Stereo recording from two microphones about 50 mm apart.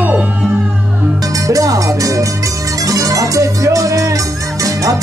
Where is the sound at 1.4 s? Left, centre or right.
Right.